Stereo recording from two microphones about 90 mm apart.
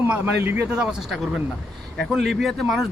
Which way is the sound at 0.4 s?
25° right (ahead or behind).